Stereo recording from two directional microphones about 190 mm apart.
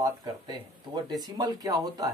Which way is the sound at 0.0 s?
20° right (ahead or behind).